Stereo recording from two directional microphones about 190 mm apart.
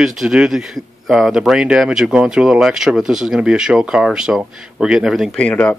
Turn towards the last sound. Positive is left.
turn(degrees=5)  # may be behind; listen again after turning